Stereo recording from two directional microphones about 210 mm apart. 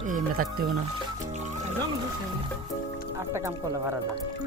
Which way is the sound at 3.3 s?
15° right (ahead or behind).